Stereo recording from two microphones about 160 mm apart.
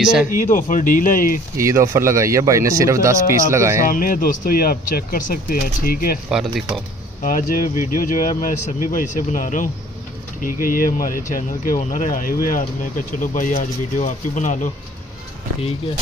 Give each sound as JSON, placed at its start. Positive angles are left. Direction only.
{"t": 0.0, "sound": "speech", "side_deg": -5}
{"t": 0.3, "sound": "speech", "side_deg": 55}
{"t": 1.6, "sound": "speech", "side_deg": -20}
{"t": 3.8, "sound": "speech", "side_deg": 60}
{"t": 6.2, "sound": "speech", "side_deg": -5}
{"t": 7.2, "sound": "speech", "side_deg": 55}